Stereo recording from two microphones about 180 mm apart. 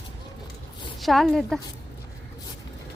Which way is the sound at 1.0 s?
Centre (ahead or behind).